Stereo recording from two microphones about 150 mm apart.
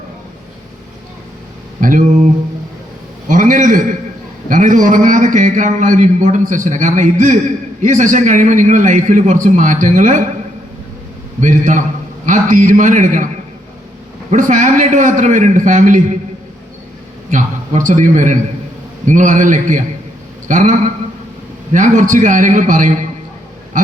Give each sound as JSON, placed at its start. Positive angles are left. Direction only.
{"t": 1.8, "sound": "a sound", "side_deg": -60}
{"t": 3.2, "sound": "a sound", "side_deg": -60}
{"t": 4.4, "sound": "a man's voice", "side_deg": -60}
{"t": 11.3, "sound": "a man's voice", "side_deg": -55}
{"t": 14.3, "sound": "a man's voice", "side_deg": -55}
{"t": 17.3, "sound": "a man's voice", "side_deg": -55}